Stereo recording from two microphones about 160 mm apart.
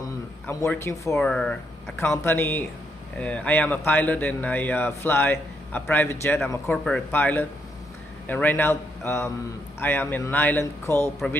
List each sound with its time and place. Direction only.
0.5 s speech: 15° left (ahead or behind)
1.1 s speech: 5° left (ahead or behind)